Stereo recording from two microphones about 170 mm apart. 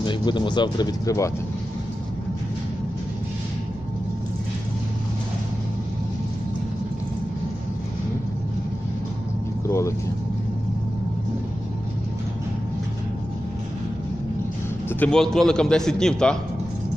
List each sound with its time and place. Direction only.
0.0 s speech: 25° left (ahead or behind)
9.7 s speech: 15° left (ahead or behind)
14.9 s a man's voice: 5° left (ahead or behind)